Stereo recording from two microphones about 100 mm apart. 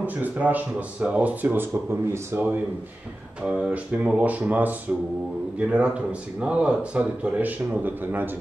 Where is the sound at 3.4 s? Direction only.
10° right (ahead or behind).